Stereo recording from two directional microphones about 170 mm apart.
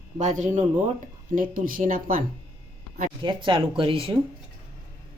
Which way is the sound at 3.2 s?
30° right (ahead or behind).